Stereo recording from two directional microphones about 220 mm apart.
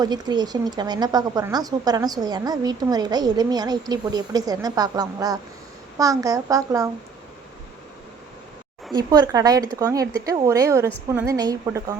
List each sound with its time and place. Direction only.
0.0 s a woman's voice: 20° right (ahead or behind)
9.0 s a woman's voice: 15° right (ahead or behind)